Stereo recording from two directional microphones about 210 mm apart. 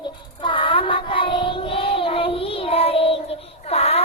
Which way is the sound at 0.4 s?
25° left (ahead or behind).